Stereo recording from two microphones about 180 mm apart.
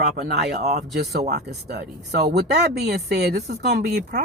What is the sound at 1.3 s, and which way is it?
Speech, 65° right (ahead or behind).